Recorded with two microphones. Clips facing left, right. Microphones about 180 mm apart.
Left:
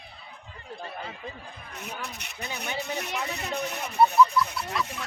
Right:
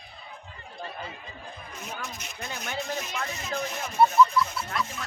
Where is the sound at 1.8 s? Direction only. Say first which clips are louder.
Left 1 dB; 65° left (ahead or behind).